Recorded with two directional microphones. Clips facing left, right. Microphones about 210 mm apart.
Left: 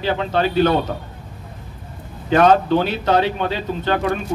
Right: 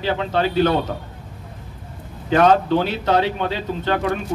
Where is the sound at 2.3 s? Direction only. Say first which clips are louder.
Left 1 dB; 50° left (ahead or behind).